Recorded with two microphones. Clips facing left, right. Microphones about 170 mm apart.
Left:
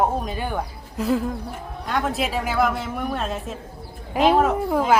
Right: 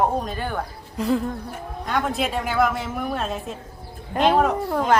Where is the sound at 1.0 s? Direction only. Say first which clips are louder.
Even; centre (ahead or behind).